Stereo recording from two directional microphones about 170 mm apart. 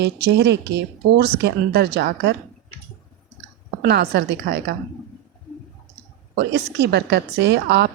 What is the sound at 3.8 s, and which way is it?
Speech, 75° right (ahead or behind).